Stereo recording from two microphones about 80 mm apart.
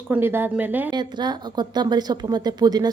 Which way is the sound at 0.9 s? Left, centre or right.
Right.